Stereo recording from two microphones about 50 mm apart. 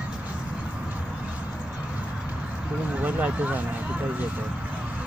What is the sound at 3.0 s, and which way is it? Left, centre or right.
Speech, right.